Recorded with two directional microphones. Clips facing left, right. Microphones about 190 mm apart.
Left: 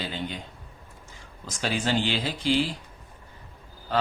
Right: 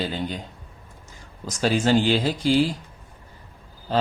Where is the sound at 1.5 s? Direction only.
40° right (ahead or behind).